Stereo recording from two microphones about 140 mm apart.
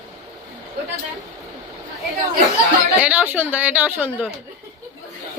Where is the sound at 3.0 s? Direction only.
10° right (ahead or behind).